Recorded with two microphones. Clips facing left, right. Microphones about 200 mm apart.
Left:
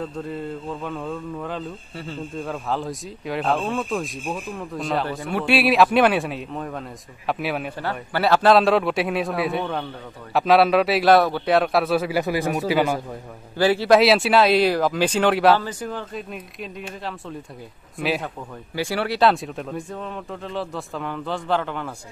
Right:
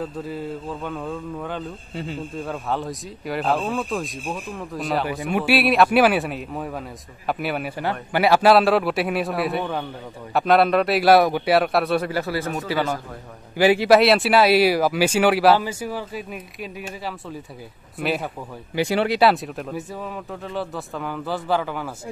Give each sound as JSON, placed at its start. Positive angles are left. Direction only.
{"t": 0.0, "sound": "speech", "side_deg": 0}
{"t": 7.8, "sound": "speech", "side_deg": -15}
{"t": 12.2, "sound": "speech", "side_deg": 15}
{"t": 13.6, "sound": "speech", "side_deg": -15}
{"t": 13.9, "sound": "speech", "side_deg": 0}
{"t": 18.8, "sound": "speech", "side_deg": -20}
{"t": 19.2, "sound": "speech", "side_deg": 0}